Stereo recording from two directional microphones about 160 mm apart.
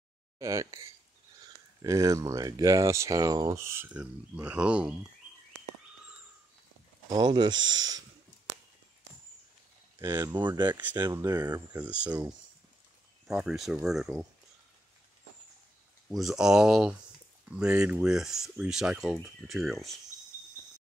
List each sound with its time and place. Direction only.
0.4 s speech: 20° right (ahead or behind)
7.1 s speech: 25° right (ahead or behind)
9.9 s speech: 20° right (ahead or behind)
10.7 s speech: 10° right (ahead or behind)
11.0 s speech: 25° right (ahead or behind)
11.7 s speech: 10° right (ahead or behind)
13.3 s speech: 5° right (ahead or behind)
16.2 s speech: 5° right (ahead or behind)